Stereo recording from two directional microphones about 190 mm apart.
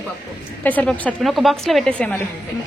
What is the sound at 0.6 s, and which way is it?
A woman's voice, 10° left (ahead or behind).